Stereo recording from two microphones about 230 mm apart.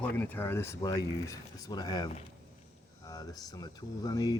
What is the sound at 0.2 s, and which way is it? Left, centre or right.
Speech, centre.